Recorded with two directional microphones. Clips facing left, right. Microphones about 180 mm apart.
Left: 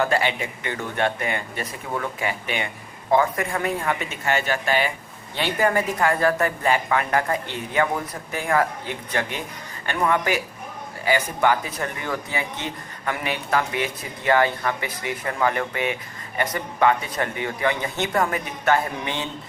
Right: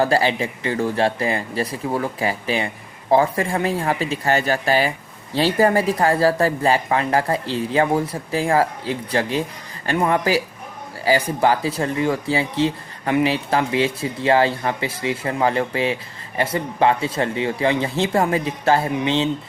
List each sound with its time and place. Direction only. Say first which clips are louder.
0.0 s speech: right 4 dB; 35° right (ahead or behind)